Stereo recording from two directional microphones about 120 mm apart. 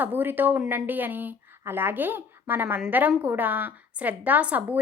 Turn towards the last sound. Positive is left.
turn(degrees=-10)  # may be behind; listen again after turning